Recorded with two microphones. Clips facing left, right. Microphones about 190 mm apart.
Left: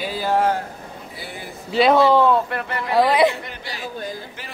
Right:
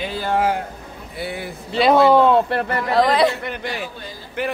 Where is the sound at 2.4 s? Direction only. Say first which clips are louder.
Right 5 dB; 35° right (ahead or behind).